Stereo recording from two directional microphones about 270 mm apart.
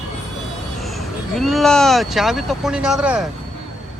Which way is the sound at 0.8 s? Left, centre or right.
Centre.